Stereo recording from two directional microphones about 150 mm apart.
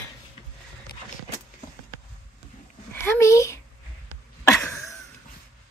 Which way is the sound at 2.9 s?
15° left (ahead or behind).